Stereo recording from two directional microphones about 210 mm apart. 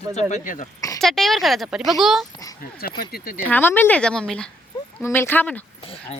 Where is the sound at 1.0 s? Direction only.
Centre (ahead or behind).